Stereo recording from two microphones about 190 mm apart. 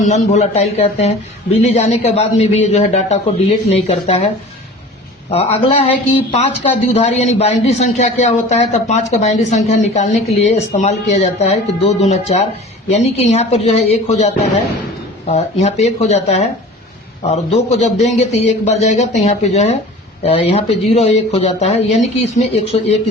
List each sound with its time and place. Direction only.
0.0 s speech: 35° left (ahead or behind)
5.3 s speech: 30° left (ahead or behind)